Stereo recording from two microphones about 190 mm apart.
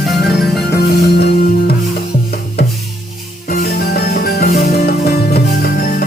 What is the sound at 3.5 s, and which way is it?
Music, 50° left (ahead or behind).